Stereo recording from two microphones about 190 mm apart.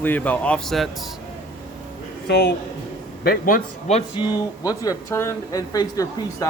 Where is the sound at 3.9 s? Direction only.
20° left (ahead or behind).